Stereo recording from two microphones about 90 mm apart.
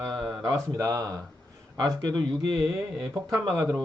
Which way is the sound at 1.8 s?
50° right (ahead or behind).